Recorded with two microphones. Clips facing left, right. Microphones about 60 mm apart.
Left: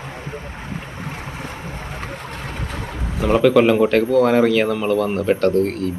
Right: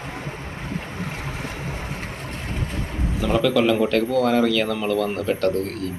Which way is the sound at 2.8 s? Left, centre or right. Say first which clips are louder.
Left 2 dB; left.